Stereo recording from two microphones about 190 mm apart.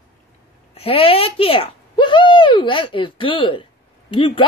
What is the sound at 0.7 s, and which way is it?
Speech, 30° left (ahead or behind).